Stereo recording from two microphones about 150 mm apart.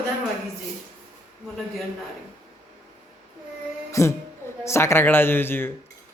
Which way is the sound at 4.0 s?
20° left (ahead or behind).